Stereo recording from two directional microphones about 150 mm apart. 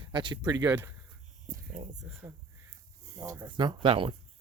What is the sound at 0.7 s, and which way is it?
Speech, 15° right (ahead or behind).